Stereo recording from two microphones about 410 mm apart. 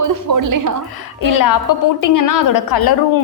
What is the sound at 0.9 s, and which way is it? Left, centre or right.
A woman's voice, left.